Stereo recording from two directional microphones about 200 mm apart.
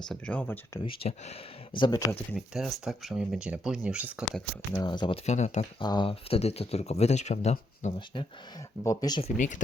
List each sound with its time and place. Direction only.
0.0 s speech: 5° left (ahead or behind)
0.8 s speech: 30° left (ahead or behind)
2.3 s speech: centre (ahead or behind)
4.3 s speech: 5° left (ahead or behind)
4.8 s speech: 20° left (ahead or behind)
5.8 s speech: 20° left (ahead or behind)
7.9 s speech: 25° left (ahead or behind)